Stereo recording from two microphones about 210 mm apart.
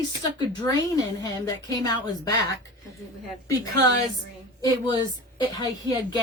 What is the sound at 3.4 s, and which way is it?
Speech, 15° left (ahead or behind).